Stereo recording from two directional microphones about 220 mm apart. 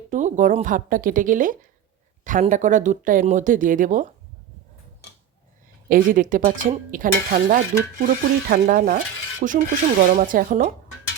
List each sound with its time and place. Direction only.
0.1 s stir: 35° right (ahead or behind)
5.9 s stir: 40° right (ahead or behind)